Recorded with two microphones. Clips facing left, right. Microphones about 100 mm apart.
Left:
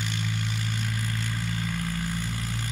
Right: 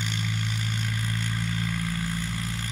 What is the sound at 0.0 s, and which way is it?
Vehicle, 5° left (ahead or behind).